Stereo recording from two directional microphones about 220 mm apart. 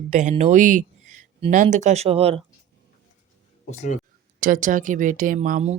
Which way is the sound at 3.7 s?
30° left (ahead or behind).